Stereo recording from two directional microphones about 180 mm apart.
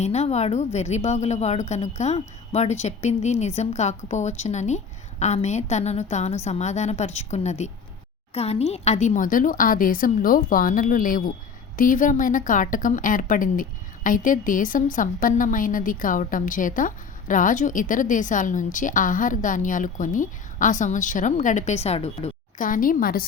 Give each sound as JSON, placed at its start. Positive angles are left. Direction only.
{"t": 0.0, "sound": "a woman's voice", "side_deg": 40}
{"t": 22.6, "sound": "a woman's voice", "side_deg": 50}